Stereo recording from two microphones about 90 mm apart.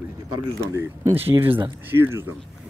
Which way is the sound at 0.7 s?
30° right (ahead or behind).